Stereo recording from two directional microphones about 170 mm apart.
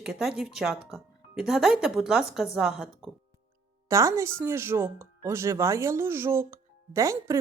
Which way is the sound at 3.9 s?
20° right (ahead or behind).